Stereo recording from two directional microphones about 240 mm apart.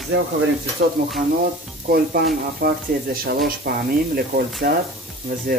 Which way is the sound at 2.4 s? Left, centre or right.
Right.